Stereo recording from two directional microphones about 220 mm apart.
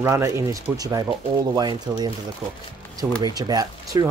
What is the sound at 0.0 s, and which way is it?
Speech, 10° right (ahead or behind).